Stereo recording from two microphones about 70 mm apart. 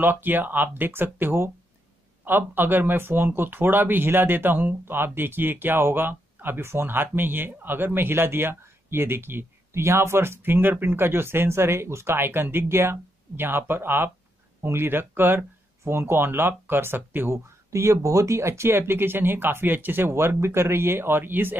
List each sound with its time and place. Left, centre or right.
0.0 s speech: right
17.6 s speech: right